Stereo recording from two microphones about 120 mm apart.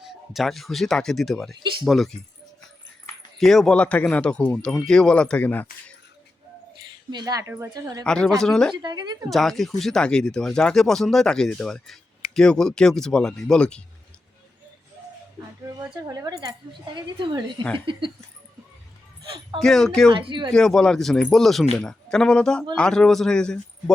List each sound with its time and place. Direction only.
0.1 s speech: centre (ahead or behind)
3.3 s speech: centre (ahead or behind)
7.1 s a woman's voice: 35° right (ahead or behind)
7.4 s speech: 20° right (ahead or behind)
7.7 s speech: 30° right (ahead or behind)
8.0 s speech: 5° left (ahead or behind)
8.7 s a woman's voice: 35° right (ahead or behind)
9.3 s speech: centre (ahead or behind)
15.8 s a woman's voice: 30° right (ahead or behind)
16.7 s a woman's voice: 40° right (ahead or behind)
17.7 s a sound: 45° right (ahead or behind)
19.5 s speech: 5° left (ahead or behind)
20.1 s a woman's voice: 45° right (ahead or behind)
20.5 s speech: 5° left (ahead or behind)